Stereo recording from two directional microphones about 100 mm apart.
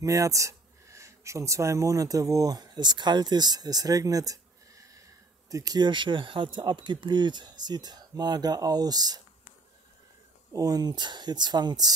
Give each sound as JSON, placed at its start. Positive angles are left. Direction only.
{"t": 0.0, "sound": "speech", "side_deg": -35}
{"t": 10.5, "sound": "speech", "side_deg": -40}